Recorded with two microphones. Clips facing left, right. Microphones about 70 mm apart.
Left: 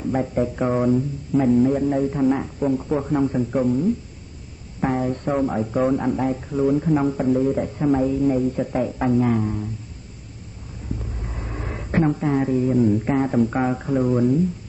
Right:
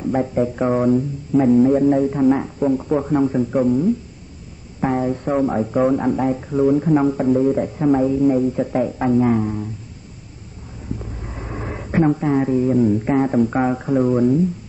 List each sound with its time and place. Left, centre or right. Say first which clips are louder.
0.0 s speech: right 3 dB; centre
11.2 s a woman's voice: right 4 dB; centre